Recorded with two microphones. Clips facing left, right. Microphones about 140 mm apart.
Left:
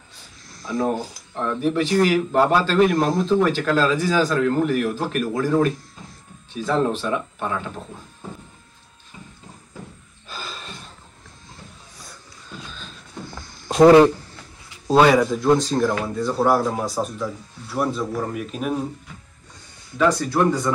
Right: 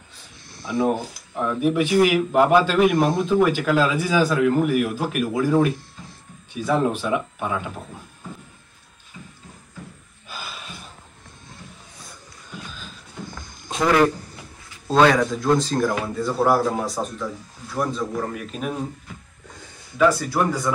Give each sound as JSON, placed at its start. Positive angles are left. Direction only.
{"t": 0.7, "sound": "a man's voice", "side_deg": -10}
{"t": 10.2, "sound": "gasp", "side_deg": -10}
{"t": 12.6, "sound": "beatboxing", "side_deg": -5}
{"t": 13.8, "sound": "speech", "side_deg": 25}
{"t": 14.9, "sound": "speech", "side_deg": 10}
{"t": 20.0, "sound": "speech", "side_deg": -5}